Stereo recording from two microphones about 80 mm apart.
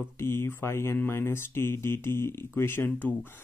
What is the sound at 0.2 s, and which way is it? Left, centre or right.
Speech, left.